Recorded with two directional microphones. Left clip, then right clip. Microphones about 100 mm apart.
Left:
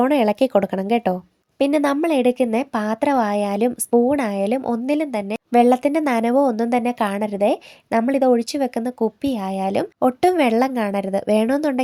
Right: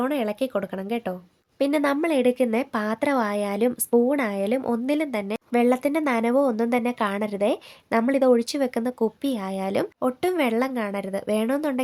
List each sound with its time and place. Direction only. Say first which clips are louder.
0.0 s speech: left 8 dB; 60° left (ahead or behind)
1.5 s a woman's voice: left 4 dB; 35° left (ahead or behind)
5.5 s a woman's voice: left 6 dB; 35° left (ahead or behind)
10.0 s a woman's voice: left 9 dB; 45° left (ahead or behind)